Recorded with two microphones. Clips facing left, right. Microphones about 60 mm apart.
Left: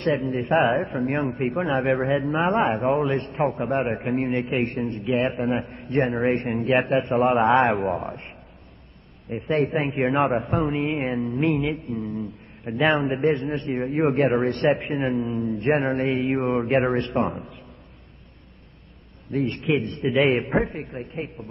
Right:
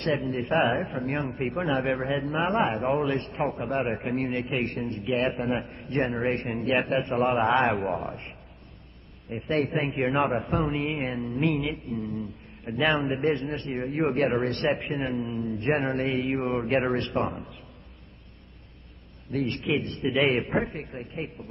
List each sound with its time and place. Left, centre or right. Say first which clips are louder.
0.0 s a man's voice: left 4 dB; centre
1.3 s a man's voice: left 3 dB; centre
1.8 s a man's voice: left 5 dB; left; by 3.6 s centre
4.0 s a man's voice: left 4 dB; centre
6.1 s a man's voice: left 5 dB; centre
11.0 s a man's voice: left 4 dB; centre
11.6 s a man's voice: left 4 dB; centre
12.6 s a man's voice: left 4 dB; centre
19.3 s a man's voice: left 4 dB; centre